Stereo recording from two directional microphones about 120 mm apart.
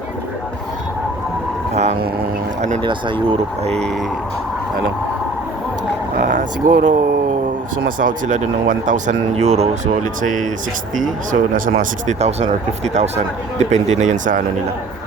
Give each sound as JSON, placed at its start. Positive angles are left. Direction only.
{"t": 2.6, "sound": "speech", "side_deg": -80}
{"t": 2.8, "sound": "speech", "side_deg": -40}
{"t": 3.7, "sound": "speech", "side_deg": 5}
{"t": 6.2, "sound": "speech", "side_deg": -90}
{"t": 8.0, "sound": "speech", "side_deg": -90}
{"t": 9.3, "sound": "speech", "side_deg": -60}